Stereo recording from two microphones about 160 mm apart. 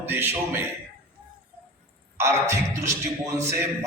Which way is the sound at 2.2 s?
15° right (ahead or behind).